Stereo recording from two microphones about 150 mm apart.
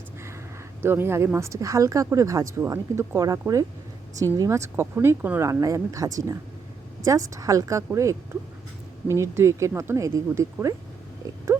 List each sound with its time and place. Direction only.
0.8 s speech: 15° right (ahead or behind)
9.0 s speech: 20° right (ahead or behind)